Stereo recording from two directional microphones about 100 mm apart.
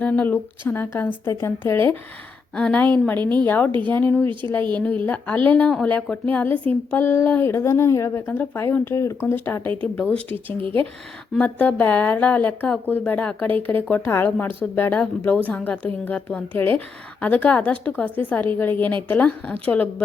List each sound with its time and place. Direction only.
0.0 s a woman's voice: 15° left (ahead or behind)
4.3 s speech: 55° right (ahead or behind)
4.7 s a woman's voice: 15° left (ahead or behind)